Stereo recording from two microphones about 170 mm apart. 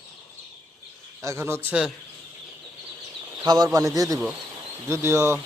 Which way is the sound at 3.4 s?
20° right (ahead or behind).